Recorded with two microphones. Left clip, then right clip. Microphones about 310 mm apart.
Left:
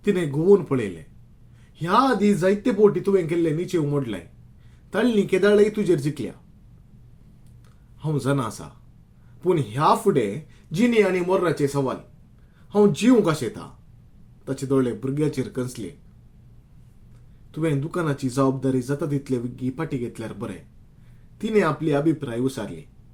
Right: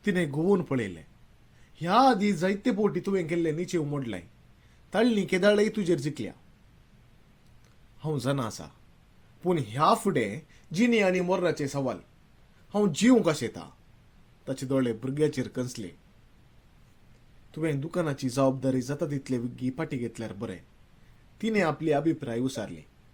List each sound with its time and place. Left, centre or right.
0.0 s speech: right
8.0 s speech: right
17.5 s speech: right